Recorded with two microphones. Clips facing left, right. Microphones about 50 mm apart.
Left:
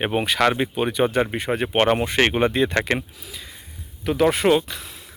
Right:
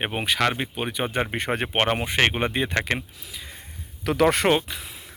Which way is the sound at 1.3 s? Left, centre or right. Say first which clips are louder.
Left 2 dB; right.